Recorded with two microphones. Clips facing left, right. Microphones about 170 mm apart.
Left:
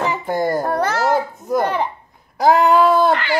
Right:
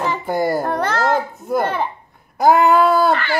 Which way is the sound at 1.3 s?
5° right (ahead or behind).